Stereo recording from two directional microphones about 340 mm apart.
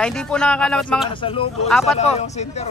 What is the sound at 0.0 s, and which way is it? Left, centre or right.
Speech, centre.